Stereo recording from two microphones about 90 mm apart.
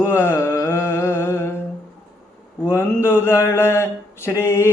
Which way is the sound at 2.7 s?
25° left (ahead or behind).